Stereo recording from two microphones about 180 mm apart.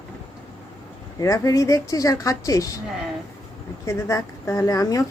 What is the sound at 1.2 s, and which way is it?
Speech, 20° left (ahead or behind).